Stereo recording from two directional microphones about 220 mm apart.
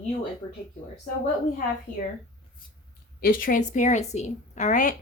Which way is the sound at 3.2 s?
40° left (ahead or behind).